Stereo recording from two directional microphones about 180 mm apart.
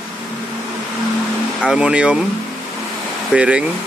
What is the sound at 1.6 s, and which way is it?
Speech, 5° right (ahead or behind).